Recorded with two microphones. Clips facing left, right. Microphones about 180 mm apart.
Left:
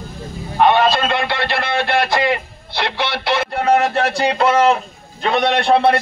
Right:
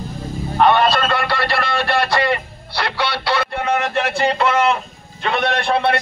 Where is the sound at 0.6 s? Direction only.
15° left (ahead or behind).